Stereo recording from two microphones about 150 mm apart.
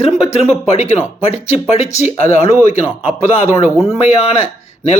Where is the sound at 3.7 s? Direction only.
15° right (ahead or behind).